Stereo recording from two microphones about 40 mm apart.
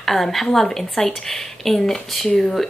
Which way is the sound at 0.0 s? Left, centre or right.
Centre.